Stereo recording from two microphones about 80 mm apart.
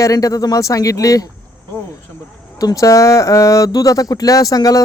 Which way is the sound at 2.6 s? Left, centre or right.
Left.